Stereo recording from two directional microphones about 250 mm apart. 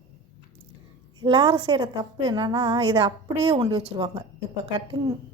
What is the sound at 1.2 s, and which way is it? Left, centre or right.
A woman's voice, centre.